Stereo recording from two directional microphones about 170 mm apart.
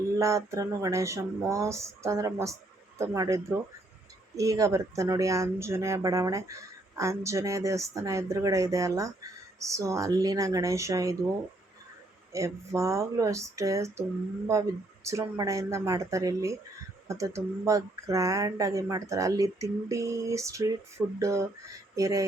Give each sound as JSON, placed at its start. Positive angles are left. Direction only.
{"t": 0.2, "sound": "speech", "side_deg": -15}
{"t": 12.3, "sound": "speech", "side_deg": -20}